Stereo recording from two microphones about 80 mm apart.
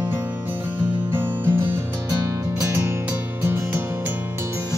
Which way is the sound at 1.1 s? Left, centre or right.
Right.